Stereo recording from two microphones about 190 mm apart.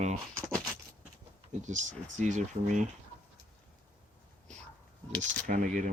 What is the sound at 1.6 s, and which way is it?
Speech, 40° right (ahead or behind).